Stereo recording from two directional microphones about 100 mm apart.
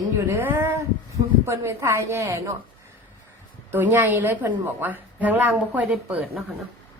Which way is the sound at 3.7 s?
20° right (ahead or behind).